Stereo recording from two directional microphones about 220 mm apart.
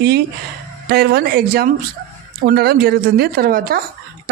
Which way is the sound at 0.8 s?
45° right (ahead or behind).